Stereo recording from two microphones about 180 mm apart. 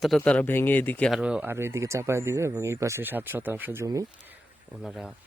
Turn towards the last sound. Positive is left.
turn(degrees=-5)  # may be behind; listen again after turning